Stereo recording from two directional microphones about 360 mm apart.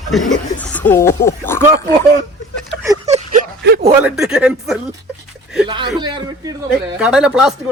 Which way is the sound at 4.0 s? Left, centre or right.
Centre.